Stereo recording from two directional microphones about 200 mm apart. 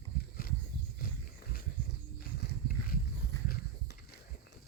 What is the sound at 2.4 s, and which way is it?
Wild animals, 50° left (ahead or behind).